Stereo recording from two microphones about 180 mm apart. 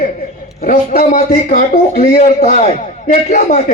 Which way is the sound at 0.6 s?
50° left (ahead or behind).